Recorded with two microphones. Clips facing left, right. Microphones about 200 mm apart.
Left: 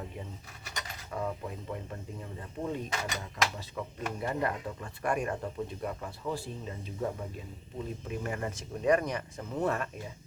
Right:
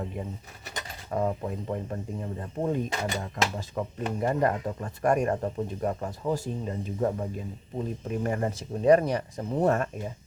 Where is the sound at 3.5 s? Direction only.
45° right (ahead or behind).